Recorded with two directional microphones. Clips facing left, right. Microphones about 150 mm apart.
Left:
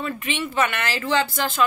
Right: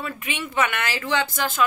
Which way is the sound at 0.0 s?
10° right (ahead or behind).